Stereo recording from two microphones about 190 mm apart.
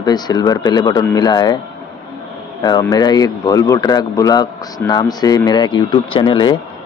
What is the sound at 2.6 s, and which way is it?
Speech, 20° left (ahead or behind).